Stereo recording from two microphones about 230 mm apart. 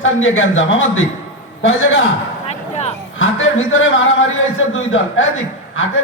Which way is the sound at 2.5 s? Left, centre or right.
Left.